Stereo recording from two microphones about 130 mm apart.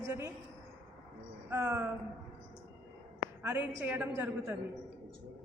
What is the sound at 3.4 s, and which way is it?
Speech, 15° right (ahead or behind).